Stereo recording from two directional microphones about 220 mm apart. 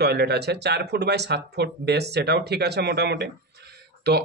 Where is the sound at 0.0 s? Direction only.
50° right (ahead or behind).